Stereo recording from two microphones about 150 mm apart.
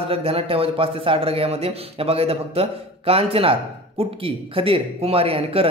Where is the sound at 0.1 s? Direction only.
40° right (ahead or behind).